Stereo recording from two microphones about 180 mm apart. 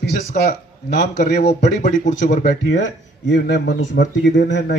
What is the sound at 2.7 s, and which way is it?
Speech, 80° left.